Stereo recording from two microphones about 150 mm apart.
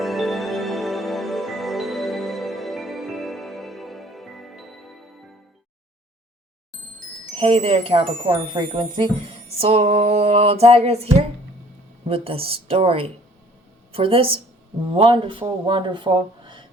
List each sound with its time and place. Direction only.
0.0 s music: centre (ahead or behind)
7.3 s speech: 45° right (ahead or behind)
9.6 s a sound: 40° right (ahead or behind)
12.0 s a woman's voice: 40° right (ahead or behind)